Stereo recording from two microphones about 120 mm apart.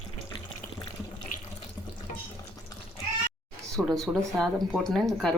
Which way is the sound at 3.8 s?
5° left (ahead or behind).